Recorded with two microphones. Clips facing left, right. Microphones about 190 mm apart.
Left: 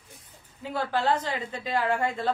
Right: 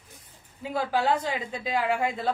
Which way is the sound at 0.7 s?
10° right (ahead or behind).